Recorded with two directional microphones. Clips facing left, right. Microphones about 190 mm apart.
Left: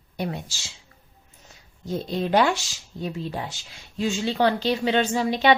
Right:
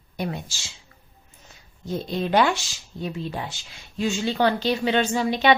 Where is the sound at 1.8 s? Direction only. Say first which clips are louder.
Even; 35° left (ahead or behind).